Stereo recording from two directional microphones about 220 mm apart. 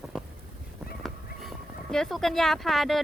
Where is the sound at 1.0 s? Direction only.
Centre (ahead or behind).